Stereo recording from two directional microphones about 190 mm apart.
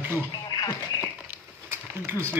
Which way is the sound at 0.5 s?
15° left (ahead or behind).